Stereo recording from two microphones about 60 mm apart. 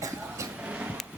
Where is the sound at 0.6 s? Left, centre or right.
Right.